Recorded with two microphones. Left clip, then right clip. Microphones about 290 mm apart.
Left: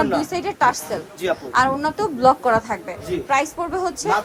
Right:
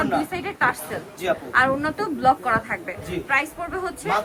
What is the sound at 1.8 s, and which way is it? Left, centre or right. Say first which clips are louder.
A woman's voice: left 3 dB; centre.